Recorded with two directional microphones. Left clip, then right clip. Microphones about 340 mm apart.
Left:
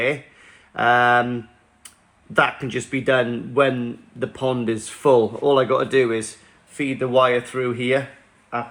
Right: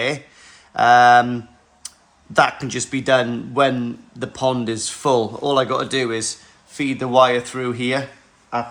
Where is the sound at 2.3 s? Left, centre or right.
Centre.